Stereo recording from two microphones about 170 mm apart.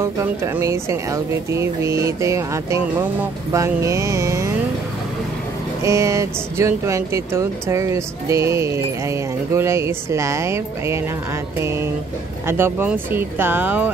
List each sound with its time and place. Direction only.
0.0 s speech: 15° right (ahead or behind)
5.9 s speech: 15° right (ahead or behind)